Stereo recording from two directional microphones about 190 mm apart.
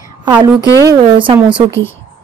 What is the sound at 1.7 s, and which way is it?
Speech, 15° left (ahead or behind).